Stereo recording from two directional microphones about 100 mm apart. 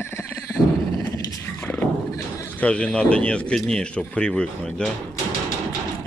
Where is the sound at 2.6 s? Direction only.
10° left (ahead or behind).